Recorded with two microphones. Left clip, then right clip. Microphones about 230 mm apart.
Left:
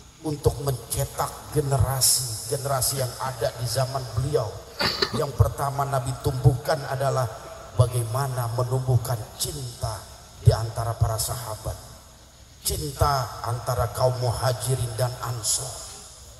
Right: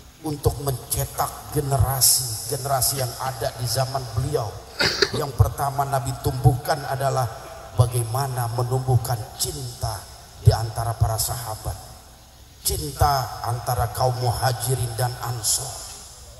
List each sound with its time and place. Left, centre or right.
0.2 s a man's voice: right
4.7 s speech: right
5.2 s a man's voice: right